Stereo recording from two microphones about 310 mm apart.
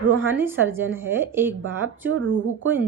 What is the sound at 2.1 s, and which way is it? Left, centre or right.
Speech, right.